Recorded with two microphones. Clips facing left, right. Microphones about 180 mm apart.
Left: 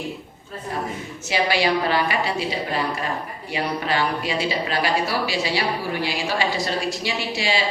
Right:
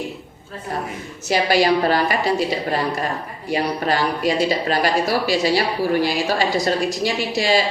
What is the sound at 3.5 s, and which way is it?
A woman's voice, 40° right (ahead or behind).